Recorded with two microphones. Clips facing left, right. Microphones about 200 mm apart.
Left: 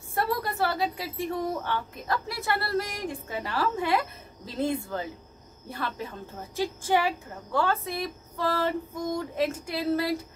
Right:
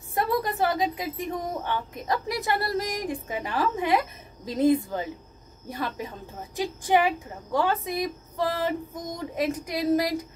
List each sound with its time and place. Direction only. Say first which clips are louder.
0.1 s a woman's voice: right 3 dB; 15° right (ahead or behind)